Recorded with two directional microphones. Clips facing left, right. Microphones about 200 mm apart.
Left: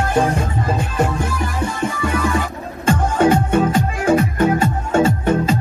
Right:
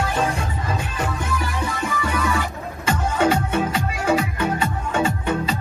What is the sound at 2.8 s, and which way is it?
Music, 50° left (ahead or behind).